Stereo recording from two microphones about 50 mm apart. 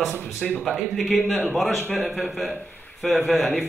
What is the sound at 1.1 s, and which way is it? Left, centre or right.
Speech, left.